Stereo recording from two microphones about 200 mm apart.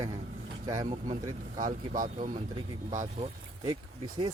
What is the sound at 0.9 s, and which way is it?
Speech, 40° right (ahead or behind).